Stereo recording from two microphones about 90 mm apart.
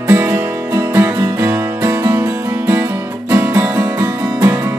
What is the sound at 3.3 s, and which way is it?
Music, 30° right (ahead or behind).